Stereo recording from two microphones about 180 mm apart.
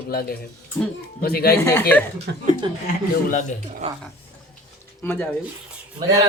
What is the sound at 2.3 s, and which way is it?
Speech, 70° right (ahead or behind).